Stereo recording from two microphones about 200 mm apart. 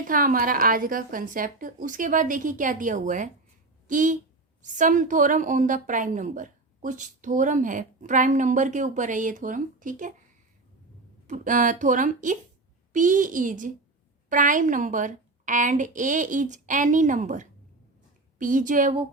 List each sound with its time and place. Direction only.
0.1 s a woman's voice: 45° right (ahead or behind)
11.3 s a woman's voice: 40° right (ahead or behind)